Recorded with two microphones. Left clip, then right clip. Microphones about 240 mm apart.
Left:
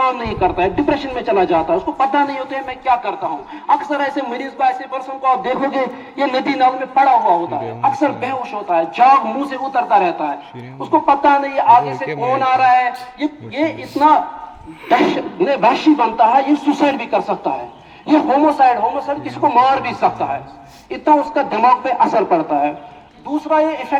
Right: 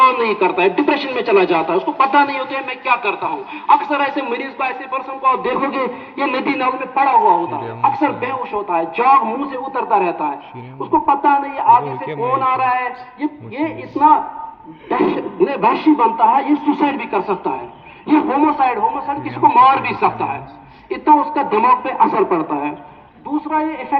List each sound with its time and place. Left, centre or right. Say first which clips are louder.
0.0 s speech: right 4 dB; left